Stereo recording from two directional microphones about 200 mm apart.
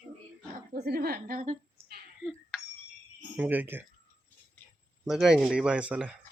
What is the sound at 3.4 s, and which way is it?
Speech, 10° right (ahead or behind).